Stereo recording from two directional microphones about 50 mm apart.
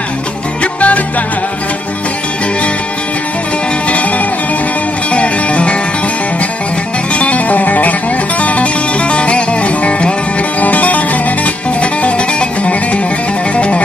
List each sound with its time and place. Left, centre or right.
0.7 s music: left
5.1 s music: left
7.2 s music: left